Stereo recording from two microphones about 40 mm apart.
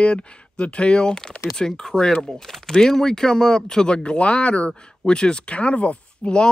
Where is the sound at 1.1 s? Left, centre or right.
Centre.